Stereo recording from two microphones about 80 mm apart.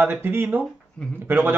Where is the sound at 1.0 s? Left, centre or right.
Centre.